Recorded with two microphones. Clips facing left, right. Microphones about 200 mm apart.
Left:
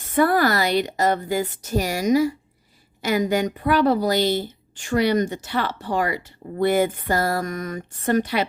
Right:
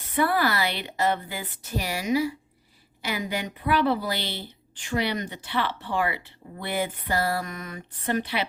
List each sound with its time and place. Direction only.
0.1 s a woman's voice: 45° left (ahead or behind)